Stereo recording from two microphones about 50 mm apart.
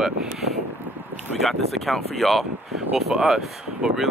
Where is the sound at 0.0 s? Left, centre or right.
Centre.